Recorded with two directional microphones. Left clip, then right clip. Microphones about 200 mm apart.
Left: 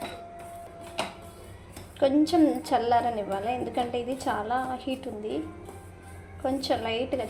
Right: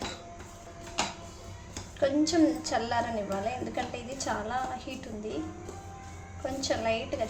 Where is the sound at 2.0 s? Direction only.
25° left (ahead or behind).